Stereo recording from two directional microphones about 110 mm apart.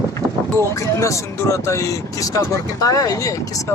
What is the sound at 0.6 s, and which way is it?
Speech, 25° left (ahead or behind).